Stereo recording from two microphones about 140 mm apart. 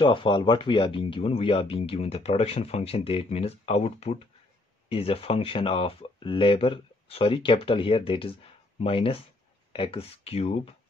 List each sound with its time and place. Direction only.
0.0 s speech: 35° left (ahead or behind)